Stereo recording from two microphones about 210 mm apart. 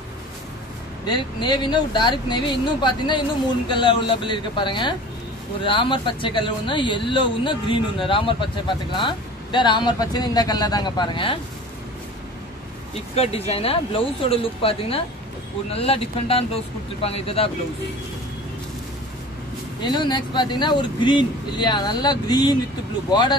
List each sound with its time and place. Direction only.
1.0 s speech: 20° left (ahead or behind)
13.1 s speech: 30° left (ahead or behind)
19.8 s speech: 20° left (ahead or behind)